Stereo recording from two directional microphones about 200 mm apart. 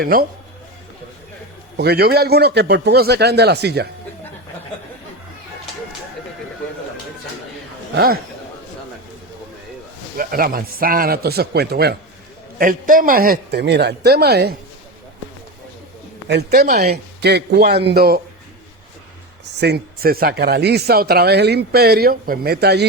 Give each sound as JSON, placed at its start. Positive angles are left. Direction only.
{"t": 0.0, "sound": "speech", "side_deg": -45}
{"t": 1.7, "sound": "a man's voice", "side_deg": -50}
{"t": 7.9, "sound": "speech", "side_deg": -50}
{"t": 10.2, "sound": "speech", "side_deg": -45}
{"t": 16.3, "sound": "speech", "side_deg": -50}
{"t": 17.2, "sound": "speech", "side_deg": -55}
{"t": 19.5, "sound": "speech", "side_deg": -55}